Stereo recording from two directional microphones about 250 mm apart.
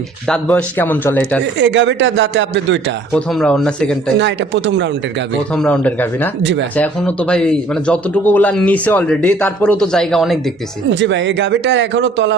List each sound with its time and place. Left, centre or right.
0.3 s speech: centre
1.5 s speech: right
3.1 s speech: centre
4.2 s speech: right
5.6 s speech: centre
6.4 s speech: right
6.7 s speech: centre
10.8 s speech: right